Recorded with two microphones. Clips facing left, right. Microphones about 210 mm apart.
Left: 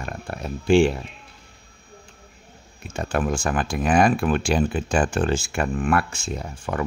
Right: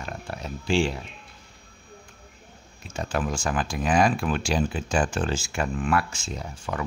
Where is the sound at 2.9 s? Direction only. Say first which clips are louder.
Left 4 dB; 60° left (ahead or behind).